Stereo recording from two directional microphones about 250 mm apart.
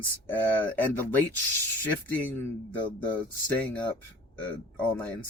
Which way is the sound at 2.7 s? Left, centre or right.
Centre.